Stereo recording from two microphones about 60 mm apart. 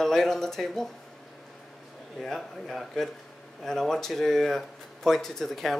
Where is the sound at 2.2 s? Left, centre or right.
Centre.